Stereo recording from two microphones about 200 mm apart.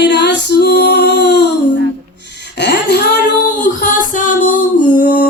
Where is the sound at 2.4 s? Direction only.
60° left (ahead or behind).